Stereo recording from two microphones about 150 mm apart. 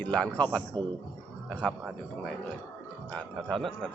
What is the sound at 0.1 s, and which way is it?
Speech, 10° left (ahead or behind).